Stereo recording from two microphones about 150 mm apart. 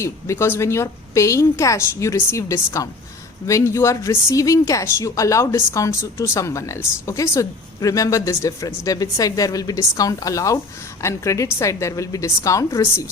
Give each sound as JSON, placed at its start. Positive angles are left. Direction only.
{"t": 0.0, "sound": "speech", "side_deg": 15}